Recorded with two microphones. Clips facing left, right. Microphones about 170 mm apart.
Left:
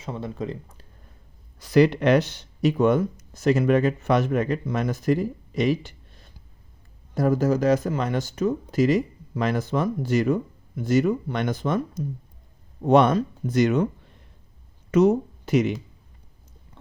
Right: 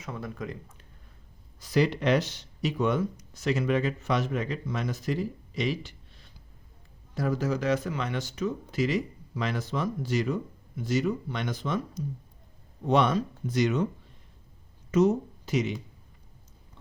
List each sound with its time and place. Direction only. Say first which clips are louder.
0.0 s speech: left 5 dB; 30° left (ahead or behind)
1.5 s speech: left 7 dB; 65° left (ahead or behind)
14.8 s speech: left 5 dB; 65° left (ahead or behind)